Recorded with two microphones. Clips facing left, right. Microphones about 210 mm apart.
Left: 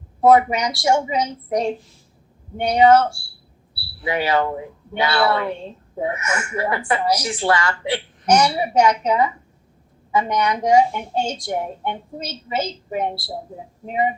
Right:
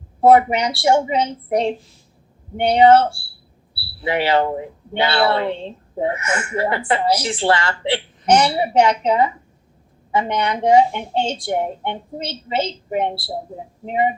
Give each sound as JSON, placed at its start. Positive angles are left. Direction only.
{"t": 0.2, "sound": "speech", "side_deg": -30}